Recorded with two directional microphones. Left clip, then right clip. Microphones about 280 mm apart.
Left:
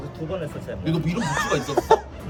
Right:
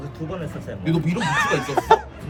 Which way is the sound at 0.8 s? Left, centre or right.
Centre.